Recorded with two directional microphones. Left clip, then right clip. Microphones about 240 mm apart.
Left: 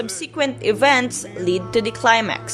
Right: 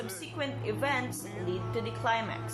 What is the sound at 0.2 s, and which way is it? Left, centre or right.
Speech, left.